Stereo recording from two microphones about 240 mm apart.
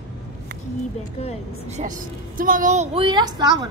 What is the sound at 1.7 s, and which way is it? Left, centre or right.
A woman's voice, right.